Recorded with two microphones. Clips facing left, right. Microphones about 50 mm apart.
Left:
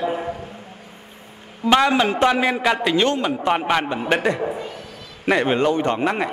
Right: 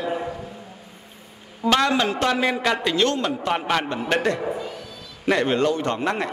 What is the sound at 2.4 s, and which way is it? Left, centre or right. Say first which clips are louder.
A man's voice: left 2 dB; centre.